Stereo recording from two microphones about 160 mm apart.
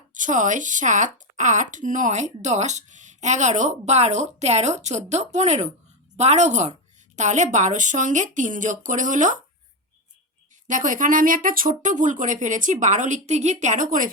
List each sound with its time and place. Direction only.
0.1 s speech: 50° right (ahead or behind)
10.7 s speech: 55° right (ahead or behind)